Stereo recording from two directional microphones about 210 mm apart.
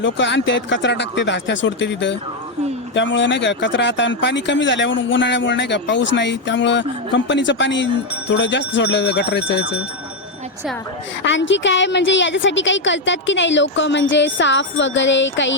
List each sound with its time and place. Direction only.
0.0 s speech: 60° left (ahead or behind)
11.2 s speech: 60° left (ahead or behind)